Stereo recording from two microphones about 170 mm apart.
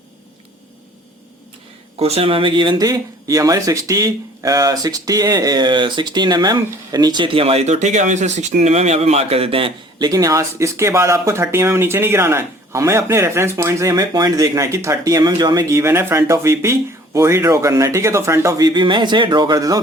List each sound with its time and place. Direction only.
2.0 s speech: 35° right (ahead or behind)